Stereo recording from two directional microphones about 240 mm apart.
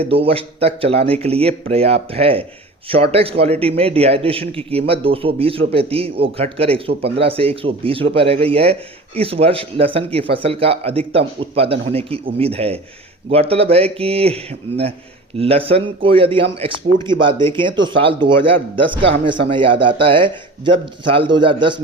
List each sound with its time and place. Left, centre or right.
0.0 s a man's voice: right
15.4 s a man's voice: right